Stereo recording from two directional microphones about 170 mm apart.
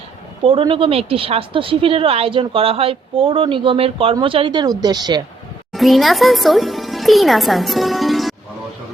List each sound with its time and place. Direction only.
0.4 s a woman's voice: 30° right (ahead or behind)
5.7 s speech: centre (ahead or behind)